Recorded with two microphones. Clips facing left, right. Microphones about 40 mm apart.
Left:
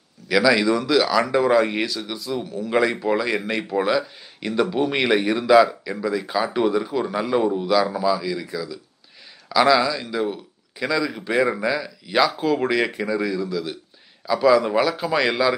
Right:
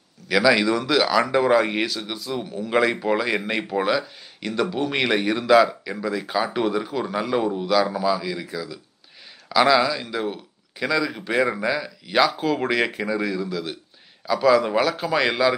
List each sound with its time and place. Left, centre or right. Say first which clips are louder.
0.3 s speech: left 1 dB; centre